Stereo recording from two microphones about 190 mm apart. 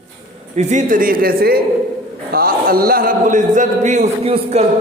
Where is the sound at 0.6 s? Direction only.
40° right (ahead or behind).